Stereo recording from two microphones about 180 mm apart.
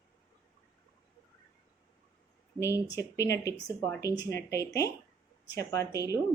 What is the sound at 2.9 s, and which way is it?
A woman's voice, 15° left (ahead or behind).